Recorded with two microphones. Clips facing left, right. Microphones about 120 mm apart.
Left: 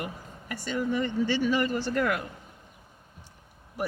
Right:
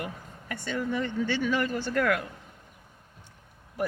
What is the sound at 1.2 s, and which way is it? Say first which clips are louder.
Speech: left 2 dB; 35° left (ahead or behind).